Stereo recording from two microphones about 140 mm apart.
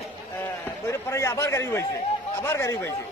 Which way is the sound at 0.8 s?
20° left (ahead or behind).